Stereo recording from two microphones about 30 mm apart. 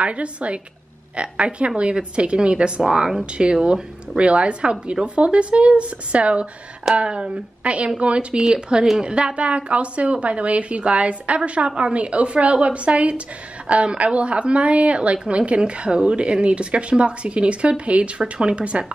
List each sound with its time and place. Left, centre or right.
0.0 s a woman's voice: right
2.8 s a woman's voice: right
7.6 s a woman's voice: right
8.4 s speech: right
9.0 s a woman's voice: right